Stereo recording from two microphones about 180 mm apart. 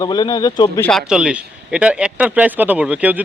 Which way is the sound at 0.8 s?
Centre (ahead or behind).